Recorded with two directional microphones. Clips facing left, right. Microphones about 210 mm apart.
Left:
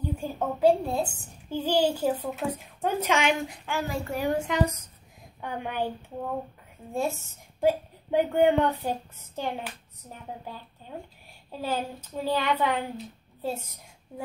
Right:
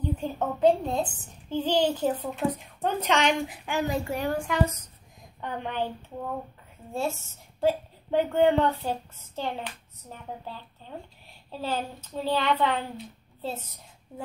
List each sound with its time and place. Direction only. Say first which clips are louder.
0.0 s a woman's voice: right 1 dB; 10° left (ahead or behind)
3.6 s speech: right 3 dB; 15° right (ahead or behind)
4.3 s a woman's voice: left 2 dB; 20° left (ahead or behind)
5.4 s a woman's voice: even; 10° left (ahead or behind)
11.5 s a woman's voice: left 1 dB; 15° left (ahead or behind)